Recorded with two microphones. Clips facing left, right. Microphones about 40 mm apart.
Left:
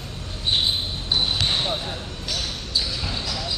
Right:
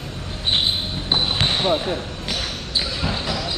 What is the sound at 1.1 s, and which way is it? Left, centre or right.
Basketball bounce, right.